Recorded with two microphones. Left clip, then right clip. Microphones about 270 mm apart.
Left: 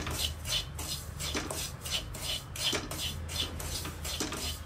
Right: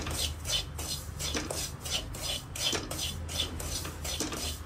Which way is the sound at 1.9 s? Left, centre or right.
Centre.